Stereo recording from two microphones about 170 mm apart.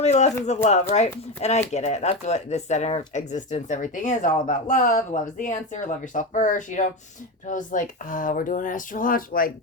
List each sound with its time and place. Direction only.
0.0 s speech: 40° left (ahead or behind); by 9.5 s 55° left (ahead or behind)